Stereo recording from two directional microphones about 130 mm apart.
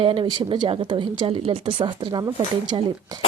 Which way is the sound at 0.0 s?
40° right (ahead or behind).